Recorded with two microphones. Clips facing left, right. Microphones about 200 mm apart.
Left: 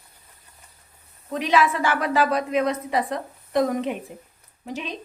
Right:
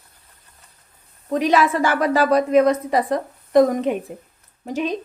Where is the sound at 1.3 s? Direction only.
40° right (ahead or behind).